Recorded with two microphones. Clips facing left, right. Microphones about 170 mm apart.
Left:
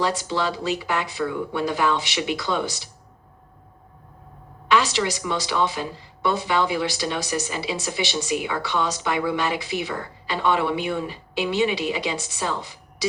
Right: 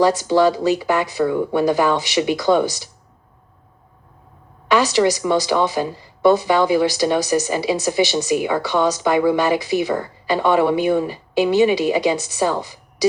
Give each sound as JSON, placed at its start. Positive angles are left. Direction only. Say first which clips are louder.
{"t": 0.0, "sound": "speech", "louder": "right 9 dB", "side_deg": -40}
{"t": 4.9, "sound": "speech", "louder": "right 9 dB", "side_deg": -40}